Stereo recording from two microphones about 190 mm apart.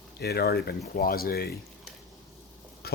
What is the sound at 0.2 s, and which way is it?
Speech, 55° left (ahead or behind).